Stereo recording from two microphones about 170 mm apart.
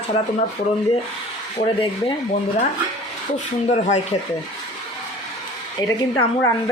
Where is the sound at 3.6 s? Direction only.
45° left (ahead or behind).